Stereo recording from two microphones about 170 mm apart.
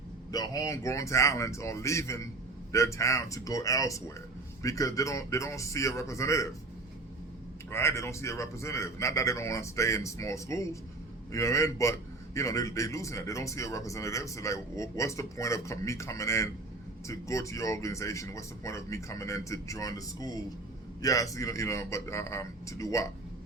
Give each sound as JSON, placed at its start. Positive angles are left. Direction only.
{"t": 0.3, "sound": "a man's voice", "side_deg": 20}
{"t": 7.7, "sound": "a man's voice", "side_deg": 15}